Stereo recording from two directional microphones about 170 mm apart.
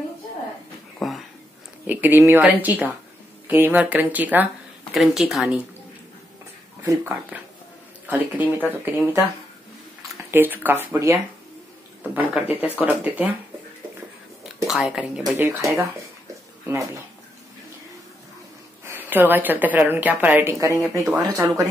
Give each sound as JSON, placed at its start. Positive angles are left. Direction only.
{"t": 0.9, "sound": "a sound", "side_deg": 0}
{"t": 1.9, "sound": "a woman's voice", "side_deg": -10}
{"t": 8.6, "sound": "a woman's voice", "side_deg": -10}
{"t": 10.3, "sound": "a woman's voice", "side_deg": -10}
{"t": 14.7, "sound": "a woman's voice", "side_deg": -5}
{"t": 18.9, "sound": "a woman's voice", "side_deg": -10}